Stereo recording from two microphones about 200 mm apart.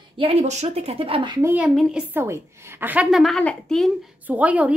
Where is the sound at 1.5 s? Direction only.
5° right (ahead or behind).